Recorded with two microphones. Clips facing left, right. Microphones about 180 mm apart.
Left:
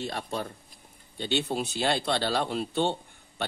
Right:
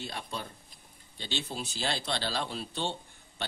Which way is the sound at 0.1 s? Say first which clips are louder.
Left 6 dB; 45° left (ahead or behind).